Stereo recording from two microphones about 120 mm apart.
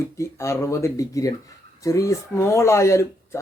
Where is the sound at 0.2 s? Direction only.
25° left (ahead or behind).